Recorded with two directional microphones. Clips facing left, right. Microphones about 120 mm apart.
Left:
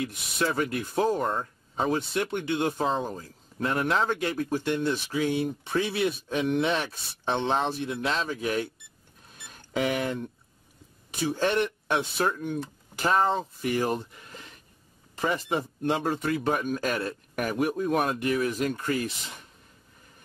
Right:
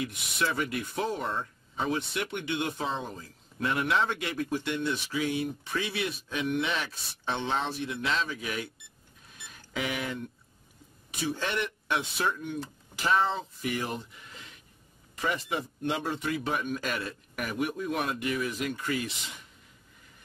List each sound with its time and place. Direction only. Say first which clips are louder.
0.0 s speech: left 3 dB; 40° left (ahead or behind)
5.8 s speech: left 6 dB; 50° left (ahead or behind)
6.0 s speech: left 5 dB; 35° left (ahead or behind)
7.2 s speech: left 4 dB; 30° left (ahead or behind)
7.6 s speech: left 4 dB; 45° left (ahead or behind)
9.8 s speech: left 6 dB; 45° left (ahead or behind)
11.3 s speech: left 7 dB; 40° left (ahead or behind)